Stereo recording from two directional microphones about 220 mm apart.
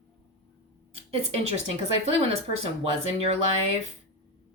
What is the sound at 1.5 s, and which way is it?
Speech, 30° right (ahead or behind).